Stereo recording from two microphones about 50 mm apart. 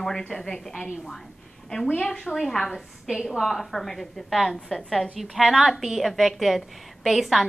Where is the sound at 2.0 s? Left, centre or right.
Centre.